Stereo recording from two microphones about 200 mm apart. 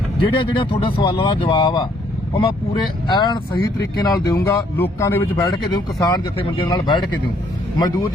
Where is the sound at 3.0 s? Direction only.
20° left (ahead or behind).